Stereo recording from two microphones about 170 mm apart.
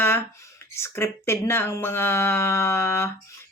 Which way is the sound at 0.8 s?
15° left (ahead or behind).